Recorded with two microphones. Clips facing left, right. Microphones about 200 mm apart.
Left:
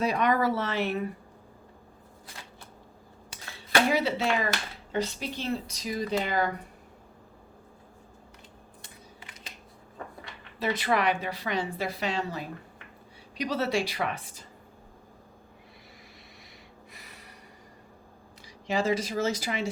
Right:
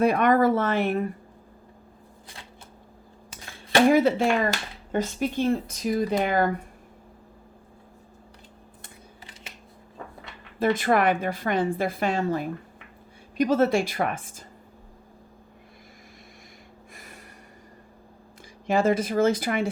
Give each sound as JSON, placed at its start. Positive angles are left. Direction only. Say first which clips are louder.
{"t": 0.0, "sound": "speech", "louder": "right 6 dB", "side_deg": -55}
{"t": 3.9, "sound": "speech", "louder": "right 6 dB", "side_deg": -50}
{"t": 10.6, "sound": "speech", "louder": "right 5 dB", "side_deg": -50}
{"t": 16.9, "sound": "snort", "louder": "right 6 dB", "side_deg": -50}
{"t": 18.7, "sound": "speech", "louder": "right 5 dB", "side_deg": -55}